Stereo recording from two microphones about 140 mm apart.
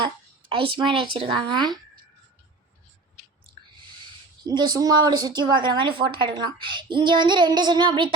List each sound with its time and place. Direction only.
0.0 s a woman's voice: 40° right (ahead or behind)
4.4 s a woman's voice: 30° right (ahead or behind)